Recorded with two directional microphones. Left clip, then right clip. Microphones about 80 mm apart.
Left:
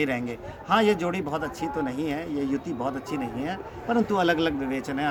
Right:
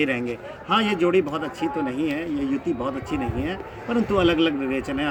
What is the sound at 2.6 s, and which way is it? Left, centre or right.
Speech, left.